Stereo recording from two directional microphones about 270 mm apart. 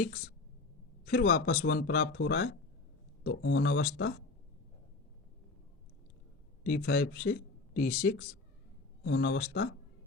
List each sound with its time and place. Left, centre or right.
1.0 s speech: left
6.7 s speech: left